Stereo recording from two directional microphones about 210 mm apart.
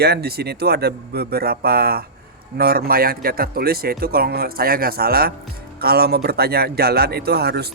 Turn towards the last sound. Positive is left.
turn(degrees=-50)  # may be behind; listen again after turning